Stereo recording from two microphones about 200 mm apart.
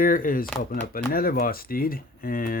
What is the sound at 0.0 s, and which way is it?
Speech, 45° left (ahead or behind).